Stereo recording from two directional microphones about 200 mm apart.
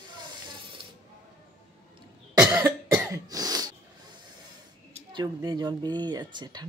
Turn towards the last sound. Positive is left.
turn(degrees=-20)  # may be behind; listen again after turning